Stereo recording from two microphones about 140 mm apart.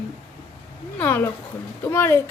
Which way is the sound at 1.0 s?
15° left (ahead or behind).